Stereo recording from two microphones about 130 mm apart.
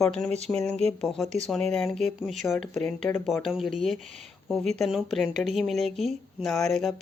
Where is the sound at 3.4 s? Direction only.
Centre (ahead or behind).